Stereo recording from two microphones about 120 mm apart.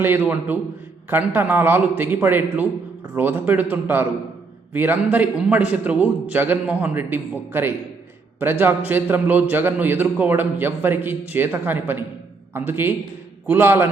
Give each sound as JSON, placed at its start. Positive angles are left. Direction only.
{"t": 0.0, "sound": "a man's voice", "side_deg": -15}